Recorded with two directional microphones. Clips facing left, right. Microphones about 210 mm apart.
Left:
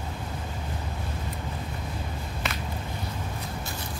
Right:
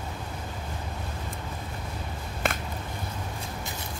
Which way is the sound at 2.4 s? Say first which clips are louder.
Right 5 dB; 50° right (ahead or behind).